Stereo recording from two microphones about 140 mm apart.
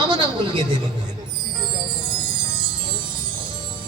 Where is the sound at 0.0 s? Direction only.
35° right (ahead or behind).